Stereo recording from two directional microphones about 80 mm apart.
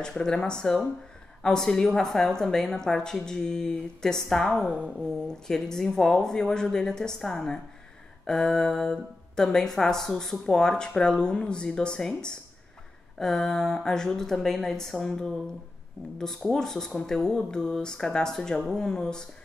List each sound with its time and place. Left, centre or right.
0.0 s a woman's voice: centre
4.6 s a sound: centre
5.5 s a woman's voice: centre
16.5 s a woman's voice: centre